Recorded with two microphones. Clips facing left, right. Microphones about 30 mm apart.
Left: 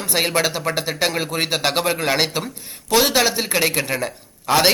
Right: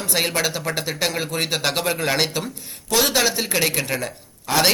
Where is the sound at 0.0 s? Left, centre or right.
Centre.